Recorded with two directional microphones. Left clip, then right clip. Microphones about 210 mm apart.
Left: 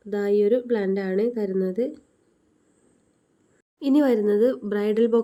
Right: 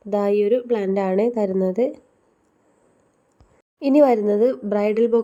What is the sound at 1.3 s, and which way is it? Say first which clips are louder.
Speech: right 4 dB; 15° right (ahead or behind).